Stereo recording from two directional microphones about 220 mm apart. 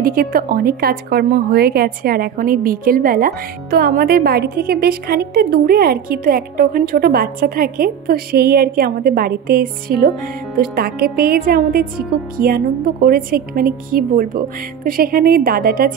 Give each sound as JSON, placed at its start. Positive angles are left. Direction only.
{"t": 0.0, "sound": "a woman's voice", "side_deg": -40}